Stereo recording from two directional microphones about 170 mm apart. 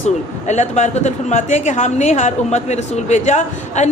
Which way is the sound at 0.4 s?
40° left (ahead or behind).